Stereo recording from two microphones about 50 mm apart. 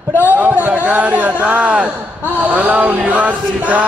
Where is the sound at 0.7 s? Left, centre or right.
Right.